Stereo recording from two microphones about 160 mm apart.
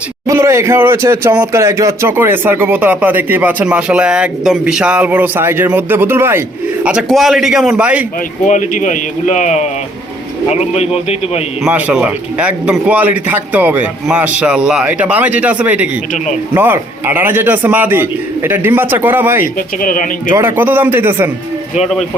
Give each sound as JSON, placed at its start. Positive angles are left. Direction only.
{"t": 0.3, "sound": "speech", "side_deg": -20}
{"t": 6.8, "sound": "a man's voice", "side_deg": -5}
{"t": 8.4, "sound": "a man's voice", "side_deg": 50}
{"t": 11.6, "sound": "speech", "side_deg": -5}
{"t": 19.8, "sound": "speech", "side_deg": 55}
{"t": 20.4, "sound": "speech", "side_deg": -10}
{"t": 21.8, "sound": "a man's voice", "side_deg": 0}